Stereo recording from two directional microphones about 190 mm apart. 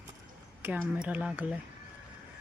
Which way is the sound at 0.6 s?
5° right (ahead or behind).